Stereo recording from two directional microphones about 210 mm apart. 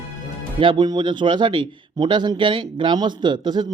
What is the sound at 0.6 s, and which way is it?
Speech, 20° right (ahead or behind).